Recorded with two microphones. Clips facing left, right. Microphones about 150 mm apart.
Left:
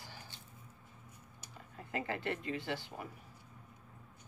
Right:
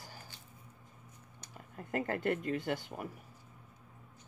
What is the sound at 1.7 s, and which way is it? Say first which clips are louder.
Speech: right 4 dB; 50° right (ahead or behind).